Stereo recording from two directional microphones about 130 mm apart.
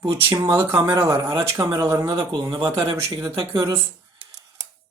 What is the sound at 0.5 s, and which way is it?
Speech, 20° right (ahead or behind).